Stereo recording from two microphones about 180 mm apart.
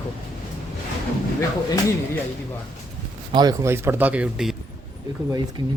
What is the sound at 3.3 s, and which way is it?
Speech, 20° right (ahead or behind).